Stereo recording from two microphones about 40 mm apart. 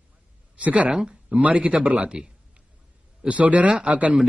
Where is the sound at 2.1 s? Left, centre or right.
Right.